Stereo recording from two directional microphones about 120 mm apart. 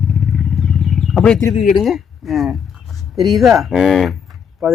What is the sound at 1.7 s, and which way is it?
Speech, centre (ahead or behind).